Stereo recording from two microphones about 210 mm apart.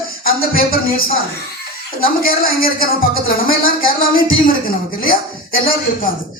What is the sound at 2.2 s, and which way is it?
Speech, 45° left (ahead or behind).